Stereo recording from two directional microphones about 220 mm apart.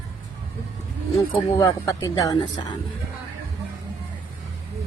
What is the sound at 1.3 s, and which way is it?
A woman's voice, 15° left (ahead or behind).